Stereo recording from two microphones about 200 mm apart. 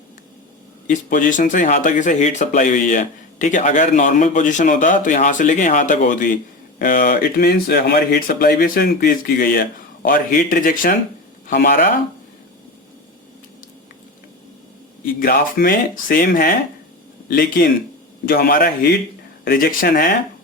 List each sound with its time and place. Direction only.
0.9 s speech: 40° left (ahead or behind)
15.0 s speech: 45° left (ahead or behind)